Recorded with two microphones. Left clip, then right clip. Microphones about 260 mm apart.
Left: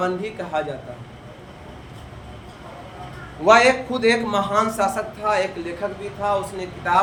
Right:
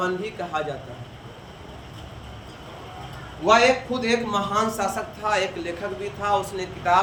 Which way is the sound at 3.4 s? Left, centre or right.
Centre.